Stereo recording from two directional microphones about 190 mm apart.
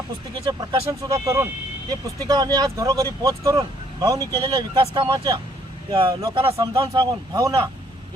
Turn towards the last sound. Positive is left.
turn(degrees=-20)  # may be behind; listen again after turning